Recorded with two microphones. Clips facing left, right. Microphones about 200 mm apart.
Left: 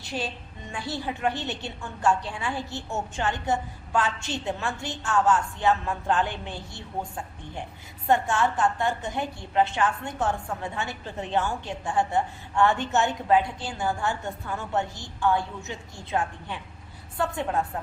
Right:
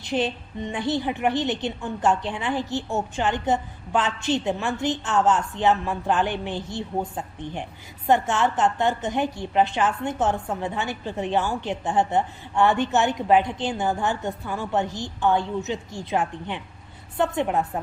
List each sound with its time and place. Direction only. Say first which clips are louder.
0.0 s a woman's voice: right 7 dB; 20° right (ahead or behind)